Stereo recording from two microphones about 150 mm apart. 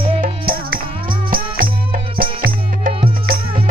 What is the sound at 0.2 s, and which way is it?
Music, 80° right.